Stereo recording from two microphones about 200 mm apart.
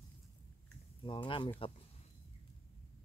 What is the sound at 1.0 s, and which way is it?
Speech, 25° left (ahead or behind).